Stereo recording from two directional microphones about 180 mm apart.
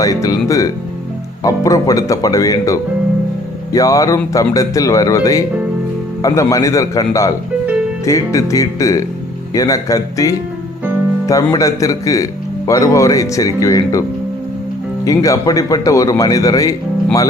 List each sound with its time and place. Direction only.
0.0 s speech: 20° left (ahead or behind)
15.0 s speech: 20° left (ahead or behind)